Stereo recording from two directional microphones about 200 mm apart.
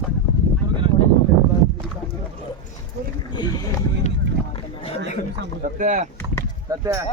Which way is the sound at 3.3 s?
20° left (ahead or behind).